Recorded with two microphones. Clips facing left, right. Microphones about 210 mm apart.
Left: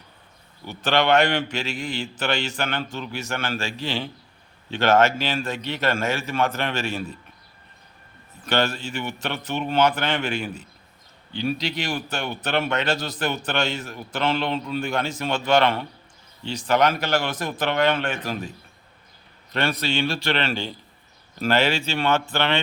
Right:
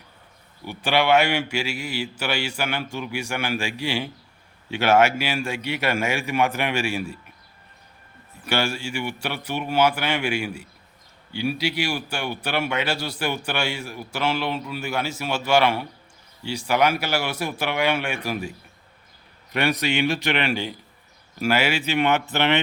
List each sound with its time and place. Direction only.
0.6 s speech: 10° right (ahead or behind)
8.4 s speech: 10° right (ahead or behind)